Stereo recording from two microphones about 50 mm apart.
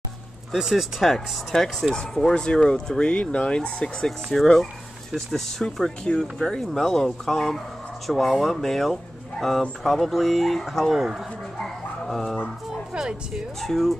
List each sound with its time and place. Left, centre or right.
0.5 s speech: centre
4.4 s speech: centre
11.5 s dog: centre
13.3 s speech: centre